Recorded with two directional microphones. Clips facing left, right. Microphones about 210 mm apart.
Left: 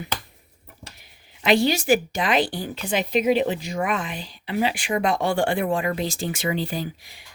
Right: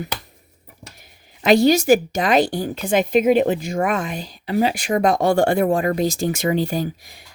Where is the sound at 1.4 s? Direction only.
40° right (ahead or behind).